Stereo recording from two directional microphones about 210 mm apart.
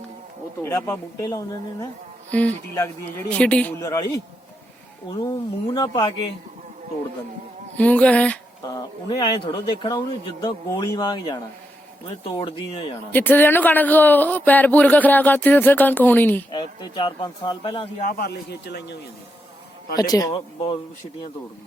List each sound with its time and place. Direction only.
0.6 s speech: 10° left (ahead or behind)
7.8 s speech: 5° left (ahead or behind)
8.7 s speech: 20° left (ahead or behind)
13.1 s speech: 10° left (ahead or behind)
16.5 s speech: 20° left (ahead or behind)
18.2 s a man's voice: 50° left (ahead or behind)
20.0 s speech: 20° left (ahead or behind)